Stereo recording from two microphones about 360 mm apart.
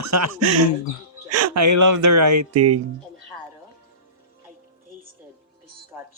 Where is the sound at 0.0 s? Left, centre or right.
Right.